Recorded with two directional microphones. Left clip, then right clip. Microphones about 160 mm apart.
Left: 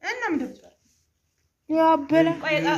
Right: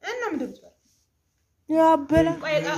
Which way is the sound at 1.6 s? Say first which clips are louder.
Right 1 dB; 25° right (ahead or behind).